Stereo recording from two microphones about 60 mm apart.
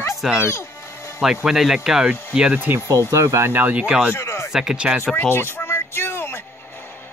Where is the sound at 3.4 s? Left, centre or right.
Right.